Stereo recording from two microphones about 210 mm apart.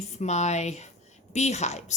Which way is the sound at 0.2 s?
35° left (ahead or behind).